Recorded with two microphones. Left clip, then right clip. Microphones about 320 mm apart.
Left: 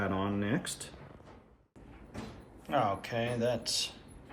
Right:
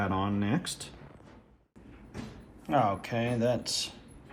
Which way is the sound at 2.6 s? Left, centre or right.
Centre.